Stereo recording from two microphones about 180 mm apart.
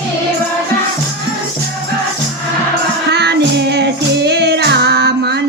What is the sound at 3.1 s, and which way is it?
Music, 70° right (ahead or behind).